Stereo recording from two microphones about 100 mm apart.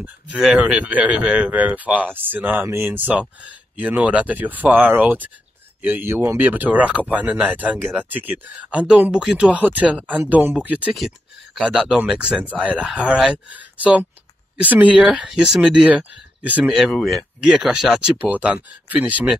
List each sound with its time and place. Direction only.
0.4 s speech: 5° right (ahead or behind)
10.9 s speech: 5° right (ahead or behind)
15.1 s speech: centre (ahead or behind)
16.9 s speech: centre (ahead or behind); by 19.3 s 15° right (ahead or behind)